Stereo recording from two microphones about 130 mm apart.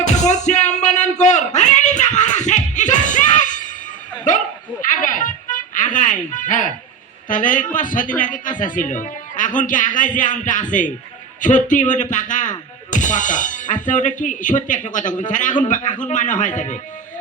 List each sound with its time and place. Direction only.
0.0 s cat: 65° left (ahead or behind)
4.3 s bow-wow: 75° left (ahead or behind)
4.9 s music: 85° left
7.3 s speech: 85° left; by 16.8 s 70° left (ahead or behind)